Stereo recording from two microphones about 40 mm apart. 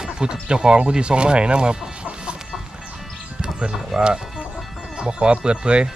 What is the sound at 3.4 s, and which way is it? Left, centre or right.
Speech, right.